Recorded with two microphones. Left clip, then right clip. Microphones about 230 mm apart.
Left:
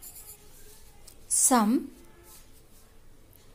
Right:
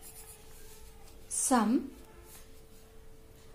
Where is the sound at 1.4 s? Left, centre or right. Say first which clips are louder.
Left 5 dB; left.